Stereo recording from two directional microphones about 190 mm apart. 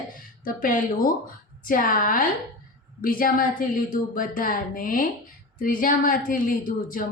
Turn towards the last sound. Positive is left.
turn(degrees=45)  # may be behind; listen again after turning